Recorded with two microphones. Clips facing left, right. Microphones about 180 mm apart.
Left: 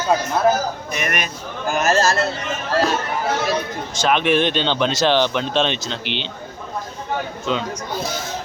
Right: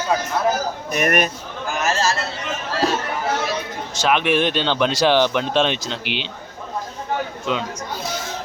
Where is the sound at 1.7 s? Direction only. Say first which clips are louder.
Left 4 dB; 45° left (ahead or behind).